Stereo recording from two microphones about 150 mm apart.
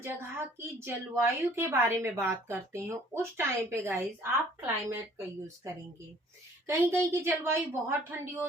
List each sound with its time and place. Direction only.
0.0 s a woman's voice: 15° right (ahead or behind)
6.7 s a woman's voice: 20° right (ahead or behind)